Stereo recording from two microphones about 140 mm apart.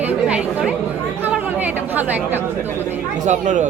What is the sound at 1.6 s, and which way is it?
Chatter, 10° right (ahead or behind).